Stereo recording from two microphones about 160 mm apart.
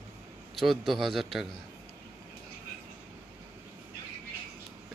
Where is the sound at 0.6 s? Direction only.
Centre (ahead or behind).